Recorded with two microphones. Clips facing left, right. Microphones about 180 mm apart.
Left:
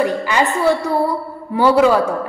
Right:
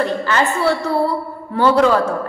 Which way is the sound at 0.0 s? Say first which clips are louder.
Left 1 dB; 15° left (ahead or behind).